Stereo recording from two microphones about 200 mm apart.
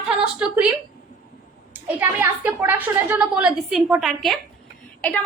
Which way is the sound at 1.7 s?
10° right (ahead or behind).